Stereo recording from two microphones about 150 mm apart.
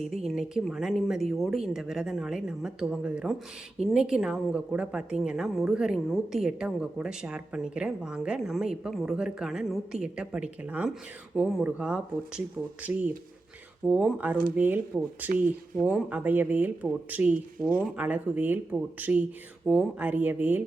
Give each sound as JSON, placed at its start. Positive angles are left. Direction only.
{"t": 0.3, "sound": "a woman's voice", "side_deg": -5}